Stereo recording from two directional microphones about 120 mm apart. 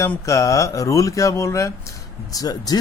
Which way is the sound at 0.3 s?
25° left (ahead or behind).